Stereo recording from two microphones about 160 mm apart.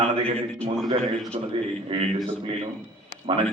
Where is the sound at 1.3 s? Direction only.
40° right (ahead or behind).